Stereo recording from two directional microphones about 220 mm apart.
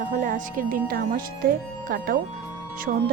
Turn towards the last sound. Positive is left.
turn(degrees=-40)  # may be behind; listen again after turning